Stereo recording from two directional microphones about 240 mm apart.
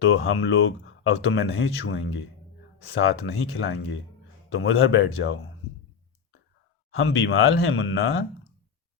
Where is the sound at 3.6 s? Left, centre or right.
Left.